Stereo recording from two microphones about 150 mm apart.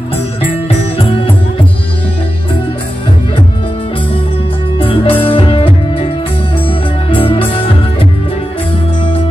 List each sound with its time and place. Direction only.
0.9 s music: 35° left (ahead or behind)
4.7 s music: 35° left (ahead or behind)
7.1 s music: 35° left (ahead or behind)